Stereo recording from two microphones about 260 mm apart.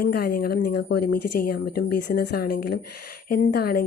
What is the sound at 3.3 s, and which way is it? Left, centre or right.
Speech, left.